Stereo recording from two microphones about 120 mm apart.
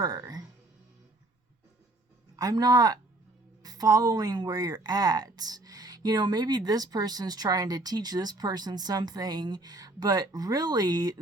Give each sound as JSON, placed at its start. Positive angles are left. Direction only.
{"t": 0.0, "sound": "speech", "side_deg": -30}
{"t": 2.3, "sound": "speech", "side_deg": -30}